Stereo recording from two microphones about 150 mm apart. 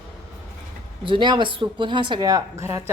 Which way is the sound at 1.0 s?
30° right (ahead or behind).